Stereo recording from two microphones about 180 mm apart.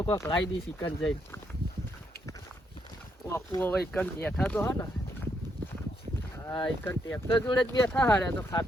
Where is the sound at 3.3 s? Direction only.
15° left (ahead or behind).